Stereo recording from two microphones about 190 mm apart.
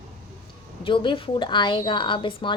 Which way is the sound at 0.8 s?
25° left (ahead or behind).